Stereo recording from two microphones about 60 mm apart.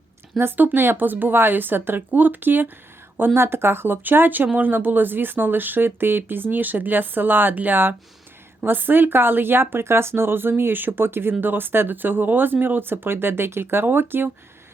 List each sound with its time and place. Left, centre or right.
0.3 s speech: right